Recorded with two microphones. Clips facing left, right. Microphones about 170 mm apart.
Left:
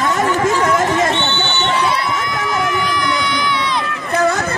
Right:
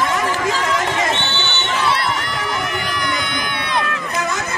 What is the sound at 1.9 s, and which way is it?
Crowd, 65° right (ahead or behind).